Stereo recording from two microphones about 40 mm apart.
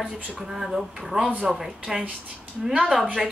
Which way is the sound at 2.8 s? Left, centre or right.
Right.